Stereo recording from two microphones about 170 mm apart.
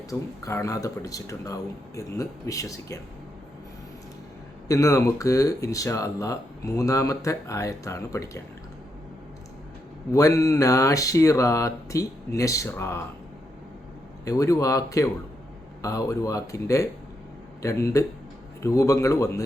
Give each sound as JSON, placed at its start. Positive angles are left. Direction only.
{"t": 0.1, "sound": "speech", "side_deg": 20}
{"t": 4.7, "sound": "speech", "side_deg": 20}
{"t": 10.1, "sound": "speech", "side_deg": 20}
{"t": 14.3, "sound": "speech", "side_deg": 20}